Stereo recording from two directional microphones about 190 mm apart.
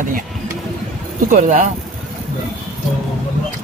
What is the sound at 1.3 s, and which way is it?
Speech, 40° right (ahead or behind).